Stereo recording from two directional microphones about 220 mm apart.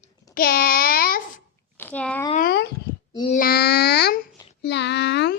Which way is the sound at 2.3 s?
40° left (ahead or behind).